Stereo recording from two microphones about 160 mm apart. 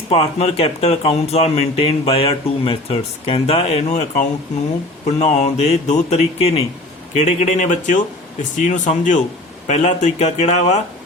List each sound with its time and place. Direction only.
0.1 s speech: 35° left (ahead or behind)